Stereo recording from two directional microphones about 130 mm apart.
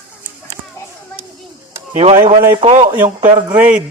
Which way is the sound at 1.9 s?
55° right (ahead or behind).